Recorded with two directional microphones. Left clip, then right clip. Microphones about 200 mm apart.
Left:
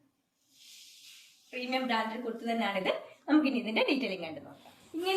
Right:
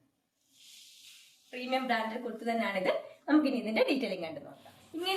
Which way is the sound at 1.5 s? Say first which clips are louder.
Right 1 dB; 15° right (ahead or behind).